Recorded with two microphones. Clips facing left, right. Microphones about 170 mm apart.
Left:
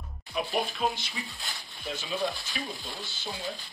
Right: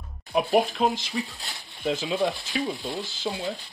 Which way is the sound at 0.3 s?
65° right (ahead or behind).